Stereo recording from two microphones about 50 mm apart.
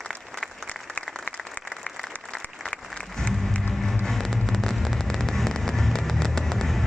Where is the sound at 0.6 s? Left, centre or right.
Centre.